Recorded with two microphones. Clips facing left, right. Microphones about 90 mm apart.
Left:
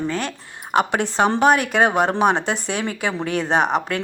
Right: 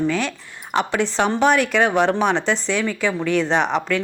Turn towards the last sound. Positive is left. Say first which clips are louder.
# even
turn(degrees=50)  # may be behind; listen again after turning